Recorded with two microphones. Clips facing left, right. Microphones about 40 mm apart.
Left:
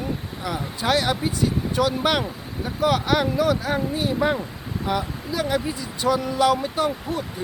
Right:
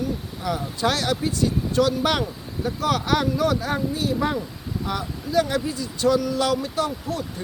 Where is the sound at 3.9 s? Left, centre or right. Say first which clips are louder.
Left 2 dB; centre.